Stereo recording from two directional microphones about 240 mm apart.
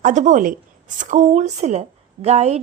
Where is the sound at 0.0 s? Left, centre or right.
Right.